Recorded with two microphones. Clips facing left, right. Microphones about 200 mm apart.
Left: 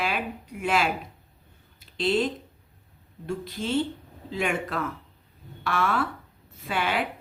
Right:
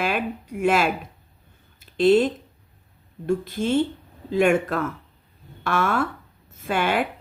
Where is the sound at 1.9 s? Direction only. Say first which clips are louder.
Right 8 dB; 50° right (ahead or behind).